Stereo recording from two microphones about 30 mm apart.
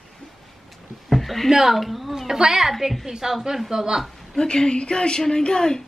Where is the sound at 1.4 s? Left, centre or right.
Centre.